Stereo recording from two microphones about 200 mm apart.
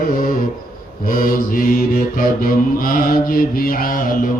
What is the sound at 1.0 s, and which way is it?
Mantra, 45° left (ahead or behind).